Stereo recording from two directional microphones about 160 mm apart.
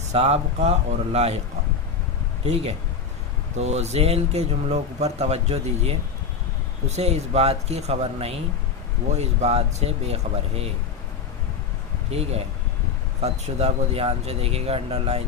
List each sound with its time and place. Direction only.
0.1 s speech: 40° right (ahead or behind)
2.4 s speech: 40° right (ahead or behind)
12.1 s speech: 40° right (ahead or behind)